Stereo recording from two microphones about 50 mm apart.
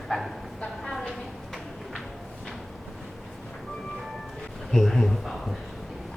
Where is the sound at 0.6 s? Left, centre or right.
Centre.